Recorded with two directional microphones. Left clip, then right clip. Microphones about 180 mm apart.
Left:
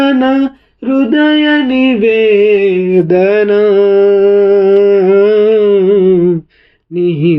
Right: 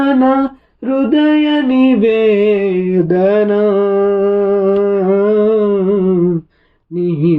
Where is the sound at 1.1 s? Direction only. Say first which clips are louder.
Left 3 dB; 20° left (ahead or behind).